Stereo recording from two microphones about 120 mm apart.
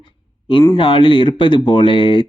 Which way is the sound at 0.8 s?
45° left (ahead or behind).